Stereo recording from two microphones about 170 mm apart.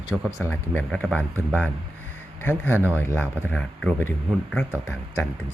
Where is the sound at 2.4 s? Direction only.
15° left (ahead or behind).